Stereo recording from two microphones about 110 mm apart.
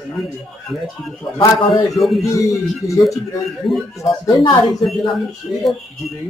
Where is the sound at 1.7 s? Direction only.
Centre (ahead or behind).